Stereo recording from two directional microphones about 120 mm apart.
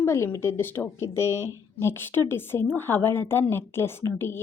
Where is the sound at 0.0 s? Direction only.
20° left (ahead or behind).